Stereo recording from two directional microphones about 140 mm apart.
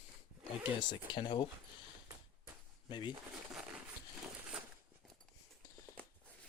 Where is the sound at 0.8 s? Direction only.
35° left (ahead or behind).